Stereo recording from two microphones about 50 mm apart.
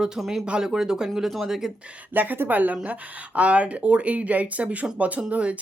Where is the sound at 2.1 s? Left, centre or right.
Right.